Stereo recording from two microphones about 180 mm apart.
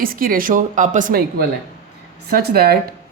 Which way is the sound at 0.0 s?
55° right (ahead or behind).